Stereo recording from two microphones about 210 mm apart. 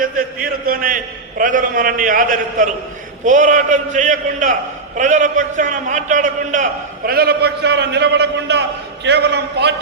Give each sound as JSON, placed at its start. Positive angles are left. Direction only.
{"t": 0.4, "sound": "a man's voice", "side_deg": -45}